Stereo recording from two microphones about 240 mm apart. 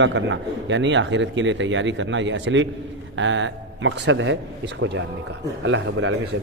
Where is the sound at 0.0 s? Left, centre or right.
Right.